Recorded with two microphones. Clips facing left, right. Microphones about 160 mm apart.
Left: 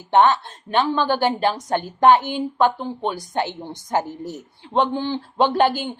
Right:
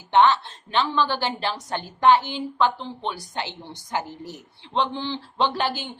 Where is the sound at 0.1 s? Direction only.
45° left (ahead or behind).